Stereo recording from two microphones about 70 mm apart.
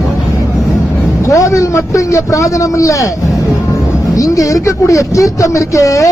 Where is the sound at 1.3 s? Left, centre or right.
Left.